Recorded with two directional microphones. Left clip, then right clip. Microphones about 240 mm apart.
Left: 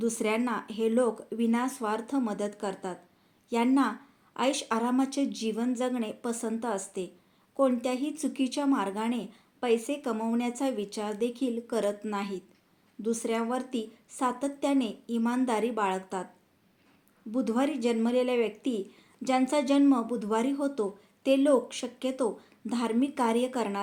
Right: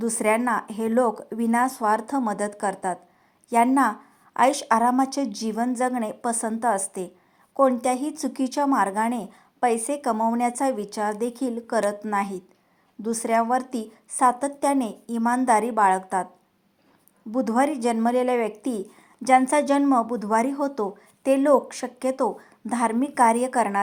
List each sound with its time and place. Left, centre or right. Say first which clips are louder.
0.0 s speech: right 7 dB; right
17.3 s speech: right 7 dB; right